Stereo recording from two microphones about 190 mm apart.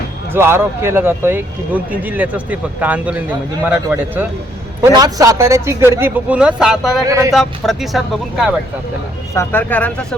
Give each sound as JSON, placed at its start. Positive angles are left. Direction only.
{"t": 0.3, "sound": "speech", "side_deg": -15}
{"t": 7.1, "sound": "speech", "side_deg": -15}
{"t": 7.3, "sound": "speech", "side_deg": 0}
{"t": 9.3, "sound": "speech", "side_deg": 15}